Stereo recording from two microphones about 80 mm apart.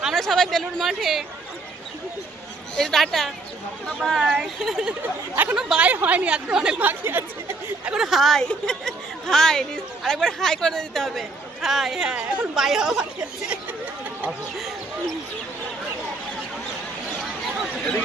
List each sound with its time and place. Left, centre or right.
0.0 s speech: centre
2.7 s a woman's voice: centre
4.2 s speech: centre
5.0 s speech: right
5.5 s speech: centre
6.8 s speech: right
7.9 s a woman's voice: centre
14.3 s speech: centre